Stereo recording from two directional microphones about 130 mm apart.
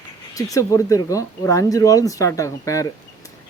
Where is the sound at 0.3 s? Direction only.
25° left (ahead or behind).